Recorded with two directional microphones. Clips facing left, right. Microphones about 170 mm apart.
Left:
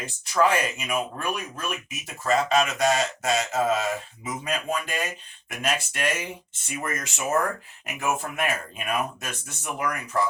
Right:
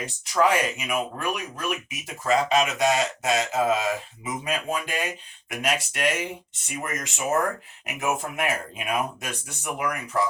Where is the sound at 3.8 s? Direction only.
5° right (ahead or behind).